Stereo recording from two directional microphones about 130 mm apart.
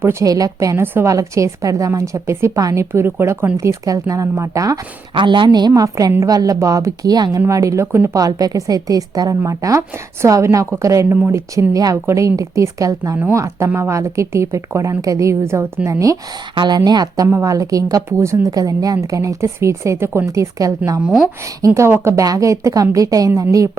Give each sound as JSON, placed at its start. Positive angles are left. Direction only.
{"t": 0.0, "sound": "a woman's voice", "side_deg": -20}
{"t": 5.1, "sound": "a woman's voice", "side_deg": -40}
{"t": 17.2, "sound": "a woman's voice", "side_deg": -20}